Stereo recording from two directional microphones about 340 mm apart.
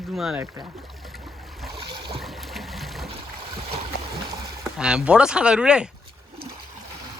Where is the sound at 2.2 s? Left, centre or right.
Centre.